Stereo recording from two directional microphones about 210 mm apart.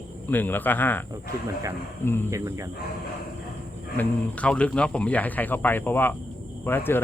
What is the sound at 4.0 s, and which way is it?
Speech, 5° left (ahead or behind).